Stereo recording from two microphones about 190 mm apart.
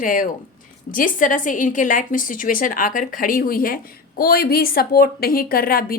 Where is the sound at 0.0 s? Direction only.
45° left (ahead or behind).